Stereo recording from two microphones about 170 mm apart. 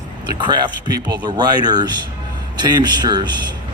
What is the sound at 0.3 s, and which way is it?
A man's voice, 25° right (ahead or behind).